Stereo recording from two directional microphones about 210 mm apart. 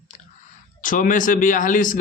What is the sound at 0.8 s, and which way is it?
Speech, 40° left (ahead or behind).